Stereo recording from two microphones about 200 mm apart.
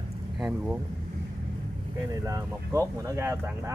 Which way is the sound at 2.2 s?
15° right (ahead or behind).